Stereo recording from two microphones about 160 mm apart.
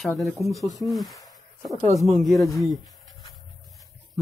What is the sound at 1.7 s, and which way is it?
Speech, 45° right (ahead or behind).